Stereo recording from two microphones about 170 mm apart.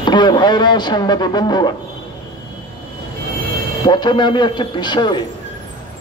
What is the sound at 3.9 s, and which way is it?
Speech, 25° left (ahead or behind).